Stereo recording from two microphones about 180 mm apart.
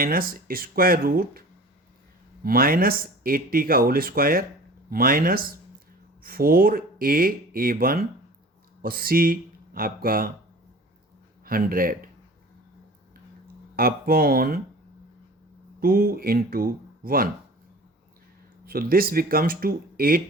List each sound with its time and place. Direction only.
0.0 s speech: 55° right (ahead or behind)
11.4 s speech: 55° right (ahead or behind)
13.7 s speech: 55° right (ahead or behind)
15.8 s speech: 55° right (ahead or behind)
18.6 s speech: 55° right (ahead or behind)